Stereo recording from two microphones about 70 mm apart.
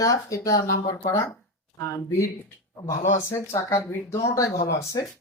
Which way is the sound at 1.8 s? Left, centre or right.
Left.